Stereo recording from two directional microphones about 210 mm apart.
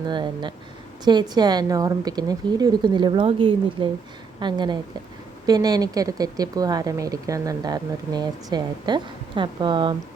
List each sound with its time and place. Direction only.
0.1 s a woman's voice: 20° right (ahead or behind)